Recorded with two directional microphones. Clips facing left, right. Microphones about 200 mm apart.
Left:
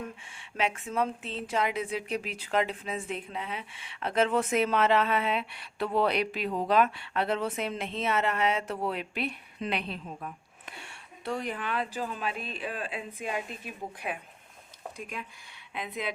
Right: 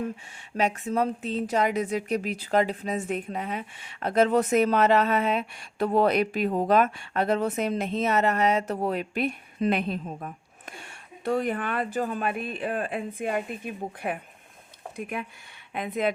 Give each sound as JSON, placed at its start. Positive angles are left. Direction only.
{"t": 0.5, "sound": "a woman's voice", "side_deg": -40}
{"t": 14.9, "sound": "a woman's voice", "side_deg": -55}